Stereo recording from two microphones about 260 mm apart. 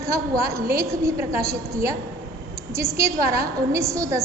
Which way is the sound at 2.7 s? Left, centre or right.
Centre.